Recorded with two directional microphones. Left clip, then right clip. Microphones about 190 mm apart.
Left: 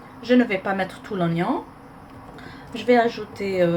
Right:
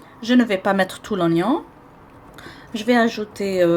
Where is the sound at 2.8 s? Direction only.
55° right (ahead or behind).